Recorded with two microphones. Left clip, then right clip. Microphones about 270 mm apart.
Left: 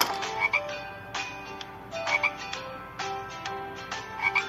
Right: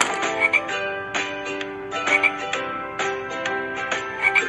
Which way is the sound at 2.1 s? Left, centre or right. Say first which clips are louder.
Right 8 dB; centre.